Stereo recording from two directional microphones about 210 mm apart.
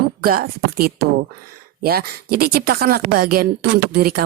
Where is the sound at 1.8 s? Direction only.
50° right (ahead or behind).